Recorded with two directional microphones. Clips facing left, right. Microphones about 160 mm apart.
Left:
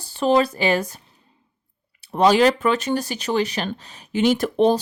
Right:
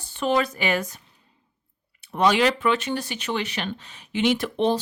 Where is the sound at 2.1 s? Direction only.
35° left (ahead or behind).